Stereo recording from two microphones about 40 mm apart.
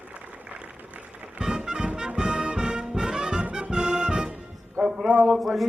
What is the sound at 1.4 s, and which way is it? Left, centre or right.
Music, centre.